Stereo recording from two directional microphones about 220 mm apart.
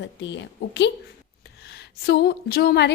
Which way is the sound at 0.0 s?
55° left (ahead or behind).